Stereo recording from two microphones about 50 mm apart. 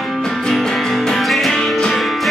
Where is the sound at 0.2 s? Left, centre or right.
Centre.